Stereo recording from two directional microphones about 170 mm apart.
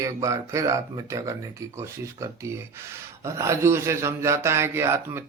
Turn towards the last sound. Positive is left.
turn(degrees=-15)  # may be behind; listen again after turning